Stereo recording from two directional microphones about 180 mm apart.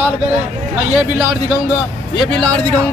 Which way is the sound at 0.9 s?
5° right (ahead or behind).